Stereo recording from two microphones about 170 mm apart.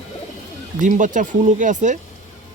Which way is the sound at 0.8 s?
50° right (ahead or behind).